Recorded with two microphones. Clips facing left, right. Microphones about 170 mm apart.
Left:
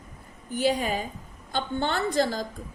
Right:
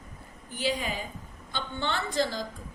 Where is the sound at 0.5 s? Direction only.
50° left (ahead or behind).